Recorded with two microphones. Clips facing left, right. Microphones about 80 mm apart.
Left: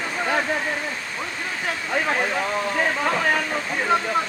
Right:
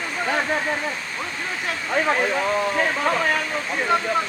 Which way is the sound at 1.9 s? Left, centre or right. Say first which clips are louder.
Right 3 dB; centre.